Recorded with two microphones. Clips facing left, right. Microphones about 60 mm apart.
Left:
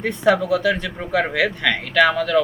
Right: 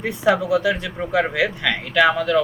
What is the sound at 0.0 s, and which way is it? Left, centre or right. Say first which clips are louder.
Speech: left 1 dB; centre.